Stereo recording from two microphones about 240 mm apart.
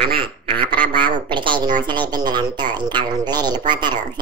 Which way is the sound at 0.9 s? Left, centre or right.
Centre.